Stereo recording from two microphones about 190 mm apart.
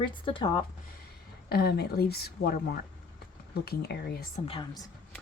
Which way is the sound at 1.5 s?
55° left (ahead or behind).